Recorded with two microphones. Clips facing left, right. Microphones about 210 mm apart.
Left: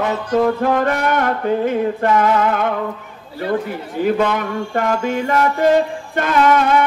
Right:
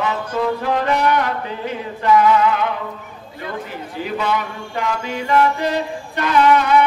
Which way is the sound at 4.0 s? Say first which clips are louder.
Left 5 dB; 50° left (ahead or behind).